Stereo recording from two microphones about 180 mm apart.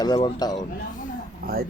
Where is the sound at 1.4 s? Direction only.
55° right (ahead or behind).